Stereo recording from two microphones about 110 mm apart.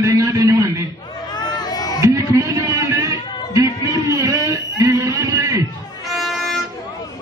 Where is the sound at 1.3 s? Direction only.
40° left (ahead or behind).